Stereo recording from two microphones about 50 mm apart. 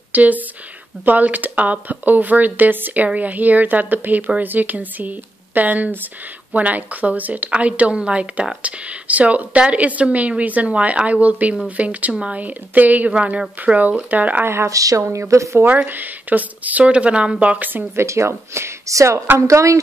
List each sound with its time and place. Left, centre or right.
0.1 s speech: right
14.4 s speech: right
15.0 s speech: right
15.9 s speech: right
16.8 s speech: right
17.9 s a woman's voice: right